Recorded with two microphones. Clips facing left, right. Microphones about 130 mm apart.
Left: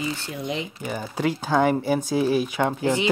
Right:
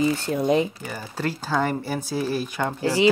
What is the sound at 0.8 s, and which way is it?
Speech, 15° left (ahead or behind).